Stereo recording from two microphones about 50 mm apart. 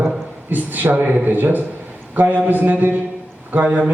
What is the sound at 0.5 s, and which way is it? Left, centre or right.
A man's voice, right.